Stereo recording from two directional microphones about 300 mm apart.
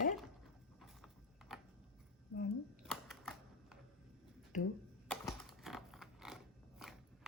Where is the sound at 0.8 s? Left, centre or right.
Centre.